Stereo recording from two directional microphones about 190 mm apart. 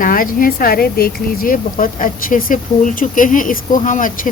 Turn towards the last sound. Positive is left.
turn(degrees=45)  # may be behind; listen again after turning